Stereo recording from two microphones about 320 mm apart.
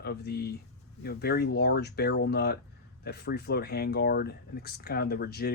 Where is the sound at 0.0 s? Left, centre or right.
Left.